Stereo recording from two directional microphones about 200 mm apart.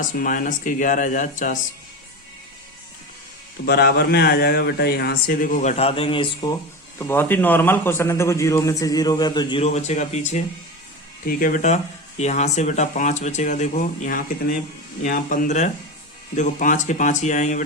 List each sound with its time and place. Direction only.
0.2 s speech: 40° left (ahead or behind)
3.7 s speech: 50° left (ahead or behind); by 6.6 s 25° left (ahead or behind)
7.0 s a man's voice: 10° left (ahead or behind); by 17.6 s 35° left (ahead or behind)